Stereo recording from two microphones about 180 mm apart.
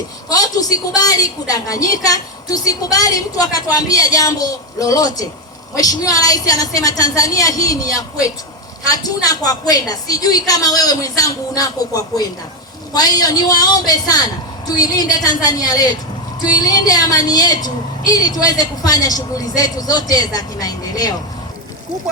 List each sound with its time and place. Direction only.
0.3 s a woman's voice: 20° left (ahead or behind)
12.9 s a woman's voice: 20° left (ahead or behind)